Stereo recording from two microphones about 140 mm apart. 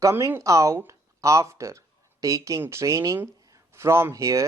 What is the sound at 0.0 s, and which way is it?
Speech, 20° right (ahead or behind).